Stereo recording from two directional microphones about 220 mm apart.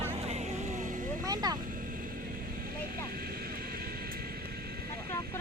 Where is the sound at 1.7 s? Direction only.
40° right (ahead or behind).